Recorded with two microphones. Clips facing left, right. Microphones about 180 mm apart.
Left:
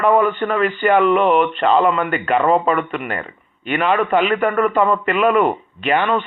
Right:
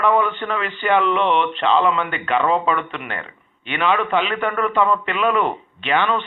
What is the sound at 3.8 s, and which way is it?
Speech, 45° left (ahead or behind).